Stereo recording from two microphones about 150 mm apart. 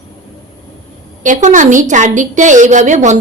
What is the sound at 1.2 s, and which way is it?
A woman's voice, 55° right (ahead or behind).